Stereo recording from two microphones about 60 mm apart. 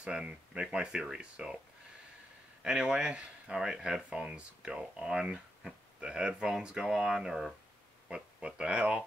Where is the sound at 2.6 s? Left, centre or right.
Centre.